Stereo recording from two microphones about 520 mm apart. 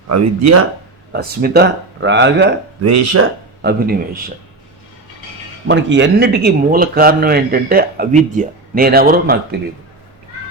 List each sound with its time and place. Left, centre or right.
0.1 s speech: right
1.1 s speech: centre
5.6 s speech: right